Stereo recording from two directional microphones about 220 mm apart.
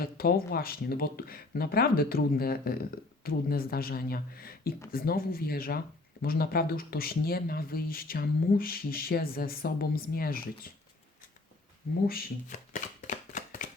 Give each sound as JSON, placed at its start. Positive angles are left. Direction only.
{"t": 0.0, "sound": "speech", "side_deg": 45}
{"t": 12.0, "sound": "shuffling cards", "side_deg": 40}